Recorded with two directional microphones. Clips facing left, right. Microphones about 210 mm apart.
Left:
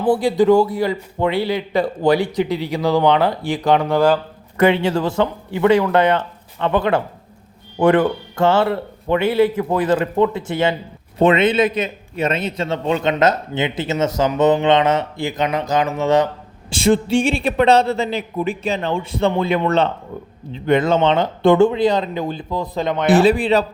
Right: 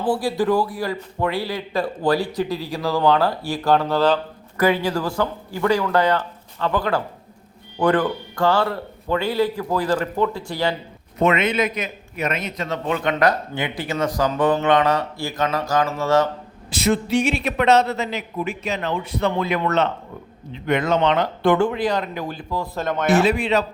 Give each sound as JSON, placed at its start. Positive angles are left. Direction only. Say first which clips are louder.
{"t": 0.0, "sound": "a man's voice", "louder": "left 6 dB", "side_deg": 20}
{"t": 4.5, "sound": "a man's voice", "louder": "left 4 dB", "side_deg": 25}
{"t": 23.0, "sound": "a man's voice", "louder": "left 5 dB", "side_deg": 35}